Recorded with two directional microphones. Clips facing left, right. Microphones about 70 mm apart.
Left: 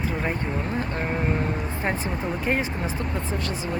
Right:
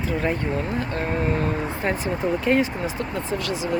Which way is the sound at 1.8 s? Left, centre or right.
Left.